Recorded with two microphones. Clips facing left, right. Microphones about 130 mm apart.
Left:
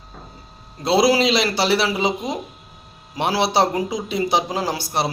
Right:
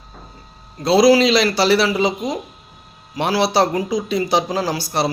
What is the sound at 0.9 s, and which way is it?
A woman's voice, 20° left (ahead or behind).